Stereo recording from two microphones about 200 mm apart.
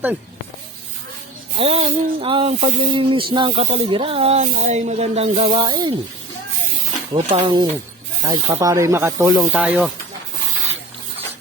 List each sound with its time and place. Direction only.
1.5 s speech: 30° right (ahead or behind)
7.1 s speech: 25° right (ahead or behind); by 9.9 s 5° right (ahead or behind)